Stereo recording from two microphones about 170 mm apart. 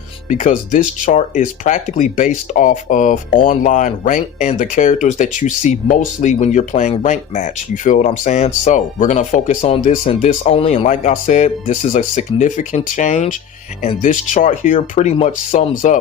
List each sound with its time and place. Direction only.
0.3 s speech: 50° left (ahead or behind)